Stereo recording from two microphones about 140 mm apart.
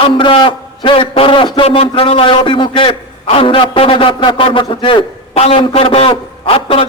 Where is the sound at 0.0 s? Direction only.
35° left (ahead or behind).